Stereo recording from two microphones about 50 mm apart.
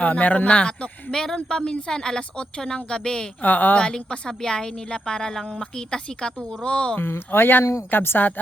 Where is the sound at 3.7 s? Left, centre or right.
Centre.